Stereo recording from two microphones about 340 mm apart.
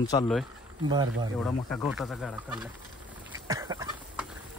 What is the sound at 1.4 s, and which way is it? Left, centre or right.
Speech, centre.